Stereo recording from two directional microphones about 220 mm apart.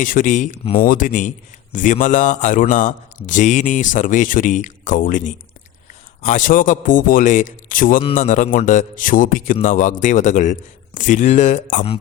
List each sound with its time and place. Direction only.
0.0 s a man's voice: 35° left (ahead or behind)